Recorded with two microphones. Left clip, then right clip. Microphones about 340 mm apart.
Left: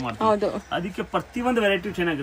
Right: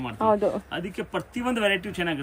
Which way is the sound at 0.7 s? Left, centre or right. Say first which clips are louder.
Left 4 dB; centre.